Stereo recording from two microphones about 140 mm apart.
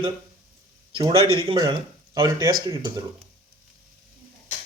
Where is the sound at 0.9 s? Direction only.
40° right (ahead or behind).